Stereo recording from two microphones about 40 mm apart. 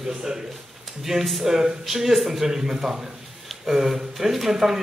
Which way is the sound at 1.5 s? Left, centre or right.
Centre.